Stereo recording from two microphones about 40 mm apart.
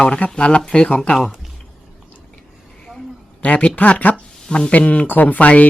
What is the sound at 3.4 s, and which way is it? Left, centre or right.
Speech, left.